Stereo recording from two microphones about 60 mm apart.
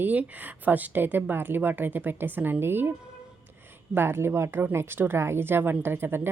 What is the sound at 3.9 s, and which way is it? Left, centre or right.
A woman's voice, right.